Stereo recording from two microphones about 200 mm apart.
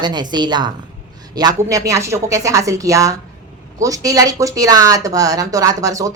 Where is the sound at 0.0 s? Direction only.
20° right (ahead or behind).